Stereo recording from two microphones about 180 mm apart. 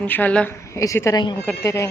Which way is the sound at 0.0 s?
10° left (ahead or behind).